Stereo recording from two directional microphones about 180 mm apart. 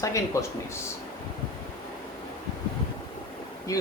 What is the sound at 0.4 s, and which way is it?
Speech, 15° left (ahead or behind).